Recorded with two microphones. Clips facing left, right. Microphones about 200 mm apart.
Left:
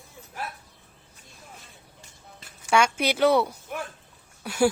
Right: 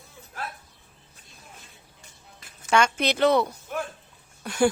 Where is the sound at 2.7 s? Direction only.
10° left (ahead or behind).